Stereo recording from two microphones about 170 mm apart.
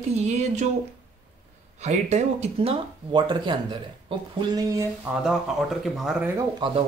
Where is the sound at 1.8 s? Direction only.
40° right (ahead or behind); by 4.8 s 20° right (ahead or behind).